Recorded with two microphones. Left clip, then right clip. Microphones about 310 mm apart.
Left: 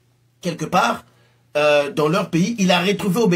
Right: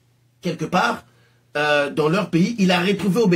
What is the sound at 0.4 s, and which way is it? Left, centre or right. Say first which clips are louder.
Speech: left 2 dB; left.